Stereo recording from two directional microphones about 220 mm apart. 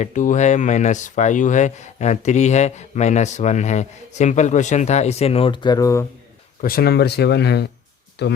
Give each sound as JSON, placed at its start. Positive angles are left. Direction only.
{"t": 0.0, "sound": "speech", "side_deg": 35}
{"t": 6.6, "sound": "speech", "side_deg": 45}